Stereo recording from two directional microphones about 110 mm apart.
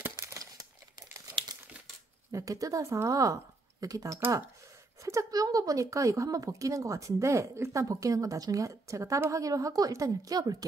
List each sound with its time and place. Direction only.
0.1 s crumpling: 35° right (ahead or behind)
2.3 s speech: 30° right (ahead or behind)